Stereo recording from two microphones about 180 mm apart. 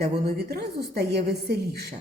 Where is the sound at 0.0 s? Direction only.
60° right (ahead or behind).